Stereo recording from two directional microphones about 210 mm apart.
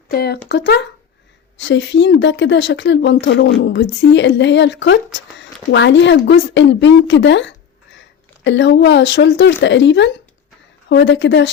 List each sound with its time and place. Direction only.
0.1 s speech: 50° left (ahead or behind)